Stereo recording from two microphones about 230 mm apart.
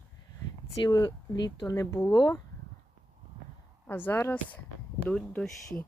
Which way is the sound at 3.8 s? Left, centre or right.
Centre.